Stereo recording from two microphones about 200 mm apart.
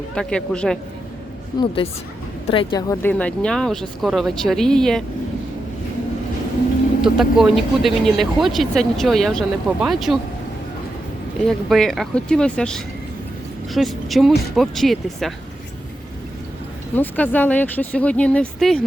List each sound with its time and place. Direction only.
0.1 s speech: 5° left (ahead or behind)
1.5 s a woman's voice: 25° left (ahead or behind)
2.9 s speech: 10° left (ahead or behind)
7.0 s speech: centre (ahead or behind)
11.4 s speech: centre (ahead or behind)
16.9 s speech: 10° left (ahead or behind)